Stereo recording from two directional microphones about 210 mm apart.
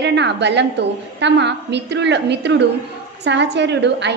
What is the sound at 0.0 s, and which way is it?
A woman's voice, 55° right (ahead or behind).